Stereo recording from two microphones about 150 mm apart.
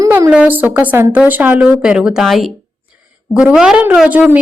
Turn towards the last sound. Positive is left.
turn(degrees=-10)  # may be behind; listen again after turning